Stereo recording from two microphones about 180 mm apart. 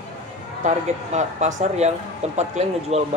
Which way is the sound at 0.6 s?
40° right (ahead or behind).